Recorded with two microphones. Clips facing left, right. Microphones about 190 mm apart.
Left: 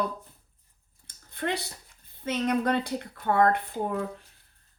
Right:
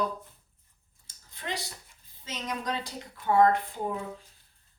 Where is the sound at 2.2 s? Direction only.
60° left (ahead or behind).